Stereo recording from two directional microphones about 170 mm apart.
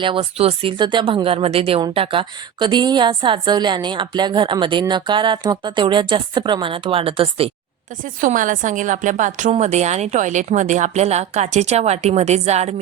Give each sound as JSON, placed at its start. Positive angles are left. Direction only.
{"t": 0.0, "sound": "speech", "side_deg": -30}
{"t": 8.0, "sound": "a woman's voice", "side_deg": -50}